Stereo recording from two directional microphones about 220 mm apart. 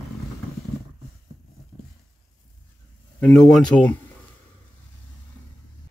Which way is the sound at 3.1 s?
5° left (ahead or behind).